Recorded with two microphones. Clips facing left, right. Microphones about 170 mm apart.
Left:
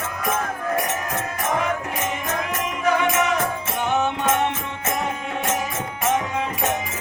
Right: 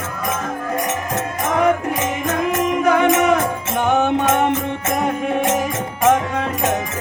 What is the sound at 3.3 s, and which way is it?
Music, 55° right (ahead or behind).